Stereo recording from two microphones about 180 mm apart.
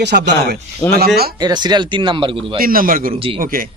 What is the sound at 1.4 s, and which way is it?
Speech, 25° right (ahead or behind).